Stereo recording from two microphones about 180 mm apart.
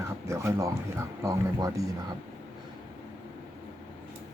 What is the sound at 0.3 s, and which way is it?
Speech, 15° right (ahead or behind).